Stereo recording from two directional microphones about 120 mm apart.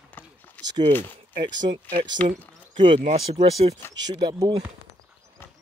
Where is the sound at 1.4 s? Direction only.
40° right (ahead or behind).